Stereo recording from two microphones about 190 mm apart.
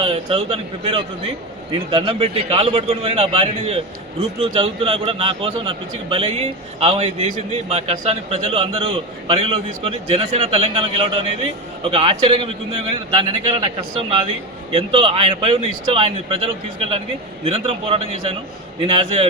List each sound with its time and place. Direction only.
0.0 s a man's voice: 30° right (ahead or behind)
14.7 s a man's voice: 30° right (ahead or behind)